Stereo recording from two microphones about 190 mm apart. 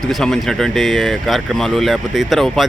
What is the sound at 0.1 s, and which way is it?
Speech, centre (ahead or behind).